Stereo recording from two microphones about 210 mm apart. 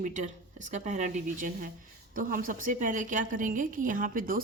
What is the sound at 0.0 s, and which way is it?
A woman's voice, 35° right (ahead or behind).